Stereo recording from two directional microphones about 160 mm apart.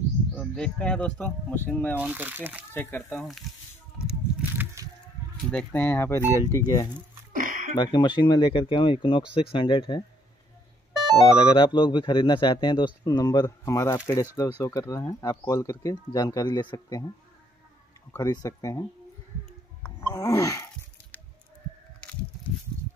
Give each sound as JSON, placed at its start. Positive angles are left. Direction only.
{"t": 0.3, "sound": "speech", "side_deg": 5}
{"t": 2.0, "sound": "speech", "side_deg": -10}
{"t": 2.7, "sound": "speech", "side_deg": 15}
{"t": 3.2, "sound": "speech", "side_deg": 0}
{"t": 4.1, "sound": "a sound", "side_deg": -10}
{"t": 5.5, "sound": "speech", "side_deg": 10}
{"t": 7.3, "sound": "a sound", "side_deg": -55}
{"t": 7.7, "sound": "speech", "side_deg": 30}
{"t": 11.3, "sound": "speech", "side_deg": 30}
{"t": 18.1, "sound": "speech", "side_deg": 25}
{"t": 20.0, "sound": "a sound", "side_deg": 20}